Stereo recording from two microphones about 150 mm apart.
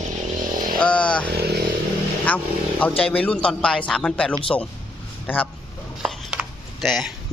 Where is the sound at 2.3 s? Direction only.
10° left (ahead or behind).